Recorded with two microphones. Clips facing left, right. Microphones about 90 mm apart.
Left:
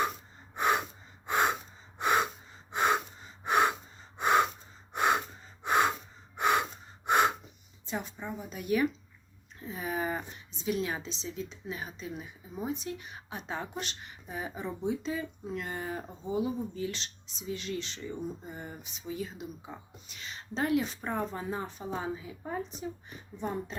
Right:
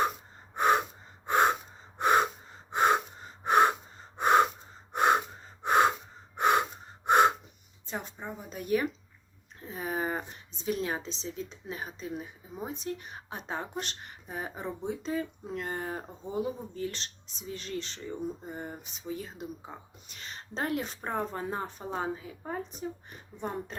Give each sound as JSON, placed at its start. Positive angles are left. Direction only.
{"t": 0.5, "sound": "gasp", "side_deg": -45}
{"t": 7.9, "sound": "a woman's voice", "side_deg": -40}